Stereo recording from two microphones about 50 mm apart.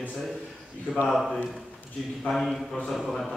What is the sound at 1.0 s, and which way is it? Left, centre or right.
Speech, centre.